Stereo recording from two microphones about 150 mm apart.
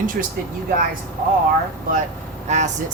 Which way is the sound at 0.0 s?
65° right (ahead or behind).